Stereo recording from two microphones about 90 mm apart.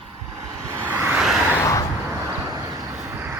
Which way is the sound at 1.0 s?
5° right (ahead or behind).